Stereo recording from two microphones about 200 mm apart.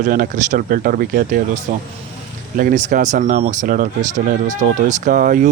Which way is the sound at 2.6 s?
45° right (ahead or behind).